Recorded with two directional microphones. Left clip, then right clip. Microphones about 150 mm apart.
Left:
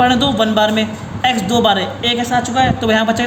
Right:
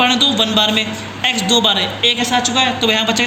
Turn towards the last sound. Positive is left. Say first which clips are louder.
# left 1 dB
turn(degrees=60)  # may be behind; listen again after turning